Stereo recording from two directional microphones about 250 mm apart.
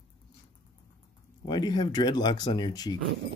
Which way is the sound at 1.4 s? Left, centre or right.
Centre.